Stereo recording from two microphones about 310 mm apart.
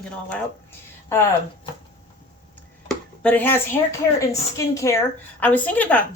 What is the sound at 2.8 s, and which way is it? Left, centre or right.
A woman's voice, centre.